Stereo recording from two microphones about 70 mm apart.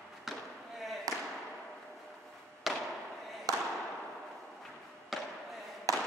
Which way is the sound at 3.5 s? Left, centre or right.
Right.